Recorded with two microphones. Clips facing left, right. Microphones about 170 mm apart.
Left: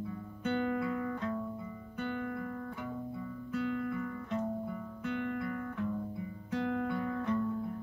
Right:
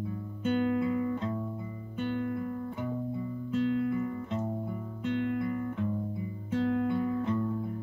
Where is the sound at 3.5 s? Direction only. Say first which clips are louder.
Right 6 dB; 20° right (ahead or behind).